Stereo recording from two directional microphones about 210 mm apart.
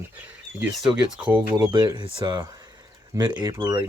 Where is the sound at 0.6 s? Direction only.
5° right (ahead or behind).